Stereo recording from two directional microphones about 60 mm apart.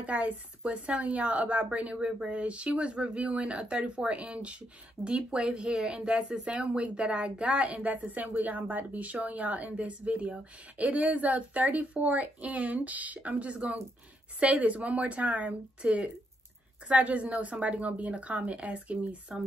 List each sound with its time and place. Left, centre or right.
0.0 s a woman's voice: right